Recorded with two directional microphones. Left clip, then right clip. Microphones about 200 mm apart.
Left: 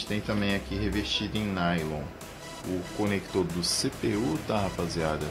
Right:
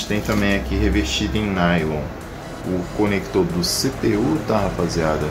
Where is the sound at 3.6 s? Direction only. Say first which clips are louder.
Right 8 dB; 40° left (ahead or behind).